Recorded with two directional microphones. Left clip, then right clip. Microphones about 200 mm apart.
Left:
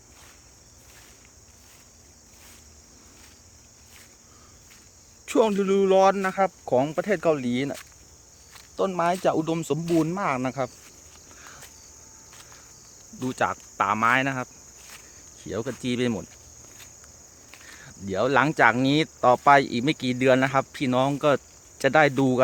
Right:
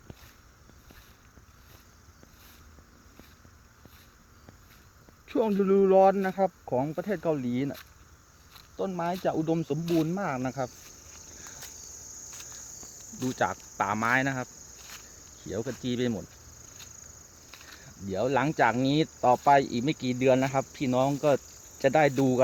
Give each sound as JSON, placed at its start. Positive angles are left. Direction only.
{"t": 5.2, "sound": "speech", "side_deg": 15}
{"t": 9.2, "sound": "cricket", "side_deg": 20}
{"t": 9.8, "sound": "speech", "side_deg": 5}
{"t": 10.1, "sound": "speech", "side_deg": 20}
{"t": 11.4, "sound": "cricket", "side_deg": 5}
{"t": 13.1, "sound": "speech", "side_deg": 5}
{"t": 15.4, "sound": "cricket", "side_deg": 20}
{"t": 18.1, "sound": "cricket", "side_deg": 20}